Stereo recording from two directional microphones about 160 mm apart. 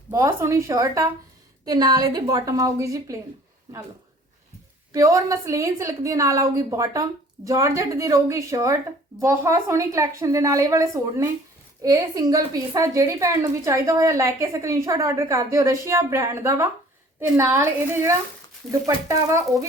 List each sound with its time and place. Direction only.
0.1 s a woman's voice: 20° right (ahead or behind)
4.9 s a woman's voice: 20° right (ahead or behind)